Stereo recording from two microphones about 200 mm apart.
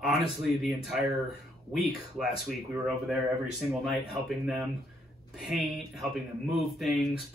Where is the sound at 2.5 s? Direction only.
Centre (ahead or behind).